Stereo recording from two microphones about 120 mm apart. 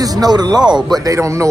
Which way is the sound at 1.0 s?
25° right (ahead or behind).